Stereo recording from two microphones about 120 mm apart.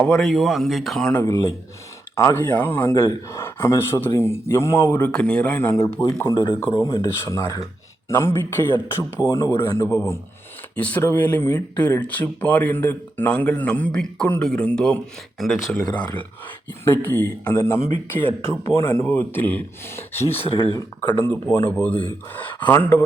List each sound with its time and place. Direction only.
0.0 s speech: 5° left (ahead or behind)
1.2 s speech: 25° left (ahead or behind)
6.3 s speech: 45° left (ahead or behind)
6.7 s speech: 25° left (ahead or behind); by 15.8 s centre (ahead or behind)
16.8 s speech: 15° left (ahead or behind)
20.7 s speech: 35° left (ahead or behind)
21.2 s speech: 20° left (ahead or behind)